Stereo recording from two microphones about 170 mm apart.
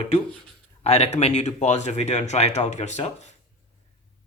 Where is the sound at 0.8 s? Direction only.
40° left (ahead or behind).